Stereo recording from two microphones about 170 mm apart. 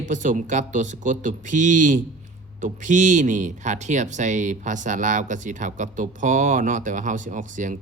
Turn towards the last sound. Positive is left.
turn(degrees=-50)  # may be behind; listen again after turning